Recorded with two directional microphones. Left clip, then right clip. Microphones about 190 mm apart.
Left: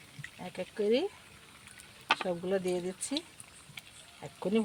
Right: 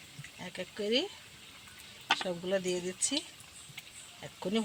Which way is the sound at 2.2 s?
50° left (ahead or behind).